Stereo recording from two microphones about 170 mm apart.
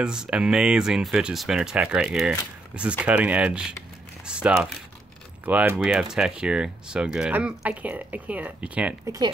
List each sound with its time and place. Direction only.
0.0 s speech: 5° right (ahead or behind)
9.0 s speech: 20° right (ahead or behind)